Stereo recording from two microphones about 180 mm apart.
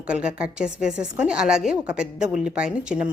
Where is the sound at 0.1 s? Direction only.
5° right (ahead or behind).